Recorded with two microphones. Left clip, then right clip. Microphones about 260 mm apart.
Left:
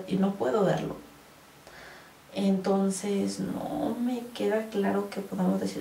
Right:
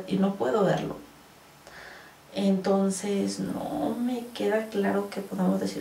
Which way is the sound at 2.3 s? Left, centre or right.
Centre.